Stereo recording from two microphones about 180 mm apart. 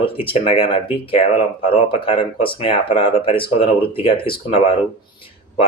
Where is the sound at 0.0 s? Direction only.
30° left (ahead or behind).